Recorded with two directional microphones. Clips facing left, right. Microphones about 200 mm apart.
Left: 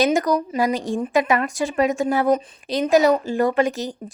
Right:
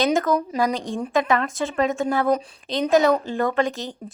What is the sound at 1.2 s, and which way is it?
Speech, 10° left (ahead or behind).